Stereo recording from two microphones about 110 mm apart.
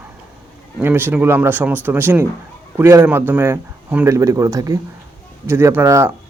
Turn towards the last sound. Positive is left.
turn(degrees=-25)  # may be behind; listen again after turning